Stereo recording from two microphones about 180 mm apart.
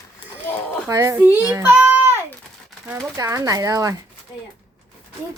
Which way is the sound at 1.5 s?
15° right (ahead or behind).